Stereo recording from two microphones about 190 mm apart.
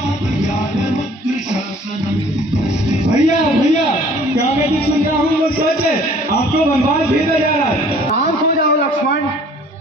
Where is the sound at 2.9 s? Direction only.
35° left (ahead or behind).